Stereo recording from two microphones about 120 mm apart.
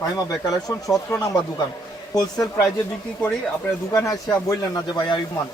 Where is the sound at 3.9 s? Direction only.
30° left (ahead or behind).